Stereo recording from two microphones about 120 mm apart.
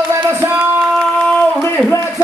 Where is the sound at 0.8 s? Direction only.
Centre (ahead or behind).